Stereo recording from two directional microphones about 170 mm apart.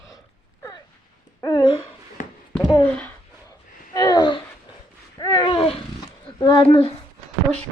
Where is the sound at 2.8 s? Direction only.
10° left (ahead or behind).